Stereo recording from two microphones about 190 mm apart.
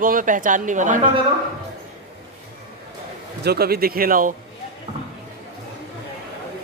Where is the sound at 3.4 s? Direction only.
55° right (ahead or behind).